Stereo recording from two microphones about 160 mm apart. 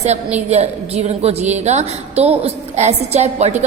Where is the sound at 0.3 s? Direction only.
40° right (ahead or behind).